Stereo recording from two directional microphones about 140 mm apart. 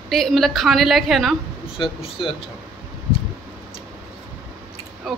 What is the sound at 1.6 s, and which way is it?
Speech, 40° left (ahead or behind).